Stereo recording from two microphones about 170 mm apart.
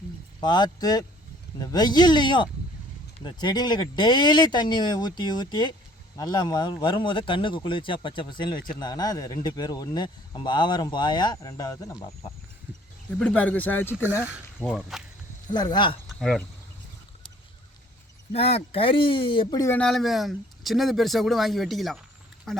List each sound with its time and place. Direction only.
0.3 s speech: 25° left (ahead or behind)
13.1 s speech: 5° left (ahead or behind)
14.8 s speech: centre (ahead or behind)
15.5 s speech: 25° left (ahead or behind)
16.0 s a sound: centre (ahead or behind)
18.3 s speech: 35° left (ahead or behind); by 19.8 s 20° left (ahead or behind)
19.8 s speech: centre (ahead or behind)